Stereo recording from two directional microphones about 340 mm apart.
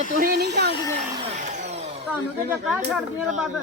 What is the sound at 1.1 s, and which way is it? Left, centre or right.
Vacuum cleaner, centre.